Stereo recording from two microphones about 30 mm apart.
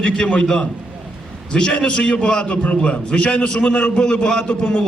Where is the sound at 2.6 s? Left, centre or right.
Left.